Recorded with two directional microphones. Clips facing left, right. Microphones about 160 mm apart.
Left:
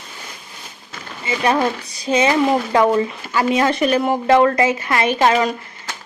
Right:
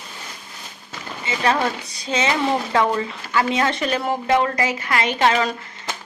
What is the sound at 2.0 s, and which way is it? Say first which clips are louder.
Speech: left 6 dB; 15° left (ahead or behind).